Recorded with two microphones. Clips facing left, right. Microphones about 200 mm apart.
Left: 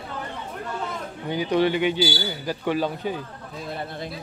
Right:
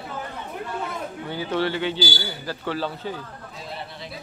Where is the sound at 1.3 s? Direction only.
15° left (ahead or behind).